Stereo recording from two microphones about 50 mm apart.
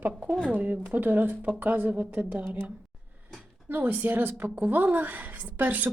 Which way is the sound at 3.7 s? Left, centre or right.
Right.